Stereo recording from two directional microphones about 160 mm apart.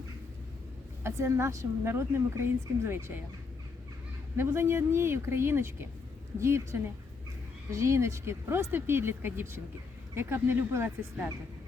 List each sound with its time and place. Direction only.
1.0 s a woman's voice: 15° right (ahead or behind)
4.4 s a woman's voice: 15° right (ahead or behind)